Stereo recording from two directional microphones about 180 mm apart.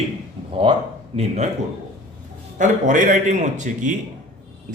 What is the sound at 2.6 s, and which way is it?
Speech, 45° right (ahead or behind).